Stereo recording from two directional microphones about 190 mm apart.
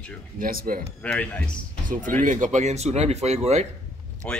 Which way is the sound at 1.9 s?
45° right (ahead or behind).